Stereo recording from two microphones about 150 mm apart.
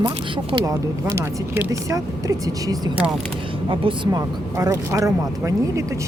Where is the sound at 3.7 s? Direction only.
35° right (ahead or behind).